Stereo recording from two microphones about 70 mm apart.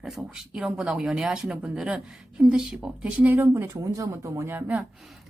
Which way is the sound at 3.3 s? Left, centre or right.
Right.